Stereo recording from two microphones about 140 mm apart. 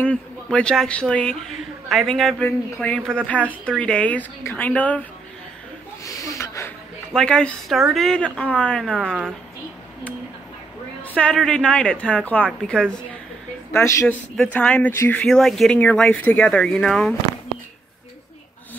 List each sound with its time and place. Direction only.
0.0 s a woman's voice: 10° left (ahead or behind)
6.0 s snort: 20° left (ahead or behind)
7.2 s a woman's voice: 5° left (ahead or behind)
11.0 s a woman's voice: 10° left (ahead or behind)
13.7 s speech: 20° left (ahead or behind)
14.3 s speech: 5° left (ahead or behind)